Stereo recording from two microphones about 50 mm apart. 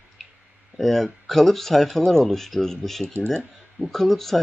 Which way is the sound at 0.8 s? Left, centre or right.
Centre.